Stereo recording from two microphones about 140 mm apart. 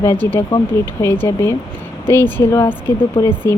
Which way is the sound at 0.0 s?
15° left (ahead or behind).